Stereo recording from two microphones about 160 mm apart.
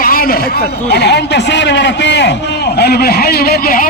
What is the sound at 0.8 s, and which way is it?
A man's voice, 90° left.